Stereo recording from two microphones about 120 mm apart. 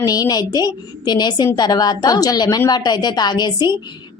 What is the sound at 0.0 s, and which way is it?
Speech, 30° left (ahead or behind).